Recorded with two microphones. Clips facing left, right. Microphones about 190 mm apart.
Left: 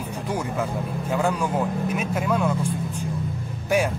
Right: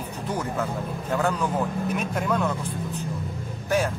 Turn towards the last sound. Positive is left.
turn(degrees=15)  # may be behind; listen again after turning